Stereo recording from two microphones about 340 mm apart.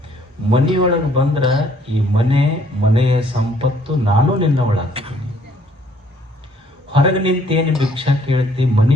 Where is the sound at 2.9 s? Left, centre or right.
Centre.